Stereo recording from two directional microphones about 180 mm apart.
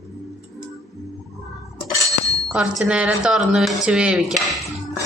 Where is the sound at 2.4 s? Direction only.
5° right (ahead or behind).